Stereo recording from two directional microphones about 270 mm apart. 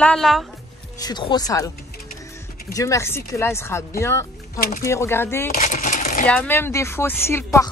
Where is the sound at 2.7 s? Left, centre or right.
Centre.